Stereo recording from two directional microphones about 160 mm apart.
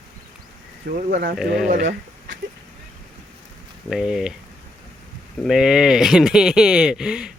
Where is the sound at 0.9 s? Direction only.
85° right.